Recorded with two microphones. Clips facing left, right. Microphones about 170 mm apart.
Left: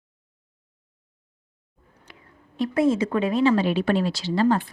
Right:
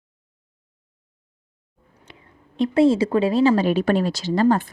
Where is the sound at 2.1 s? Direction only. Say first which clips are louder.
Right 3 dB; 20° right (ahead or behind).